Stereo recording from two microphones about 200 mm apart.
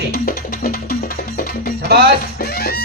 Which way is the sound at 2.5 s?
50° left (ahead or behind).